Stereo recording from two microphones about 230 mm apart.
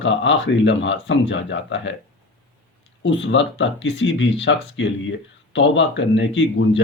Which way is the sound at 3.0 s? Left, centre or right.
Left.